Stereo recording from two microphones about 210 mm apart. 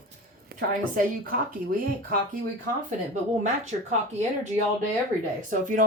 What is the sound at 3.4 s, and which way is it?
Speech, 35° right (ahead or behind).